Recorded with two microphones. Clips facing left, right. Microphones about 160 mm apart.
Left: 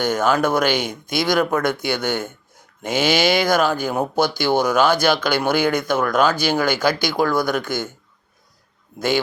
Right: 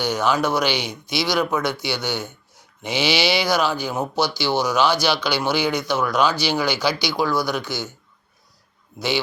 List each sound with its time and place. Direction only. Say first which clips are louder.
0.0 s speech: left 2 dB; 50° left (ahead or behind)